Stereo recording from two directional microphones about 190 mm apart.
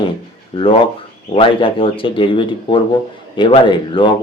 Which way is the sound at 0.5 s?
25° left (ahead or behind).